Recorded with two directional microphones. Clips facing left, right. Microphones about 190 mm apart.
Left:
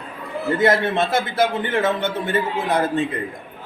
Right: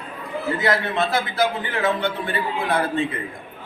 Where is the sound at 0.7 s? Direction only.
25° left (ahead or behind).